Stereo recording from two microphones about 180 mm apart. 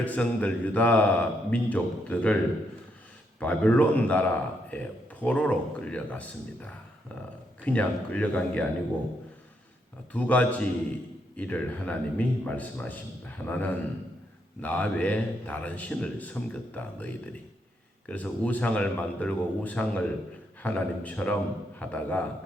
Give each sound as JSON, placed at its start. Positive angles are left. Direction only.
{"t": 0.0, "sound": "a man's voice", "side_deg": 10}
{"t": 3.4, "sound": "a man's voice", "side_deg": 5}
{"t": 10.1, "sound": "a man's voice", "side_deg": 10}